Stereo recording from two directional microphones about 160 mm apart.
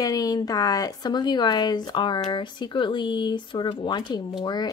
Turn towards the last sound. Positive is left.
turn(degrees=25)  # may be behind; listen again after turning